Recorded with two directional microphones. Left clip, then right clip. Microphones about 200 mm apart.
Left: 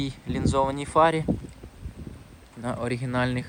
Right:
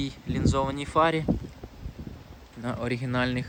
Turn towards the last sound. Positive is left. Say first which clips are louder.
# left 1 dB
turn(degrees=-5)  # may be behind; listen again after turning